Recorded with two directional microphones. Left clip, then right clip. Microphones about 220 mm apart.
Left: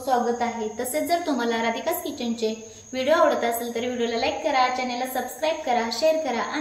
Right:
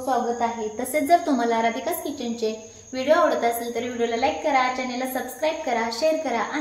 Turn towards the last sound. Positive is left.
turn(degrees=-15)  # may be behind; listen again after turning